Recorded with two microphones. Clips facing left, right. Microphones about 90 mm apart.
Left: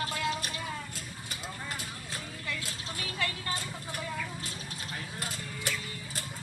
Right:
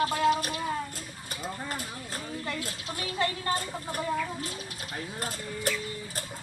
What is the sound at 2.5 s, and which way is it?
Vehicle, 35° right (ahead or behind).